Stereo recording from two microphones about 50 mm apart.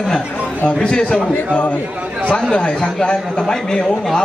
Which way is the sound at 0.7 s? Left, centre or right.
Centre.